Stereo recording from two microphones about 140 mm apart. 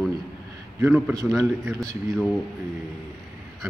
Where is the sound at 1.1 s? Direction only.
20° right (ahead or behind).